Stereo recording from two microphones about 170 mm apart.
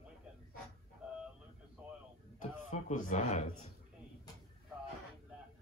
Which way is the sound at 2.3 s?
50° left (ahead or behind).